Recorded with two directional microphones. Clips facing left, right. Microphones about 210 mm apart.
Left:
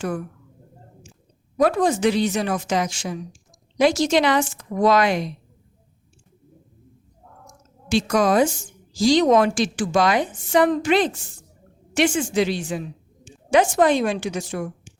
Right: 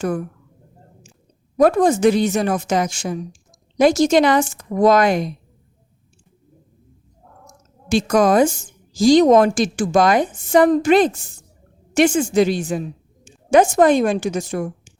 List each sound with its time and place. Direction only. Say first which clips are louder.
1.5 s a woman's voice: right 4 dB; 50° right (ahead or behind)
7.9 s a woman's voice: right 4 dB; 45° right (ahead or behind)